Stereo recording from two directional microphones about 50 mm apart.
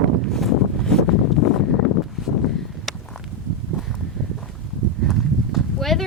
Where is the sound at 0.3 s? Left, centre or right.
Centre.